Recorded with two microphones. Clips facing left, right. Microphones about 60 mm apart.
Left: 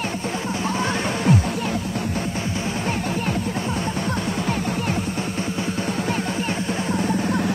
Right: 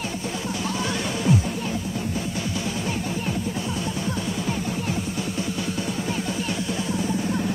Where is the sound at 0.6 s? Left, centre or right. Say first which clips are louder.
Left 4 dB; left.